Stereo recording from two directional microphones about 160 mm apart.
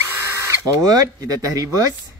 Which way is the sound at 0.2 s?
20° right (ahead or behind).